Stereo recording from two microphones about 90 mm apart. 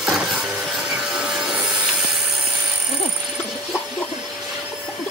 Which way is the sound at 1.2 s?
10° right (ahead or behind).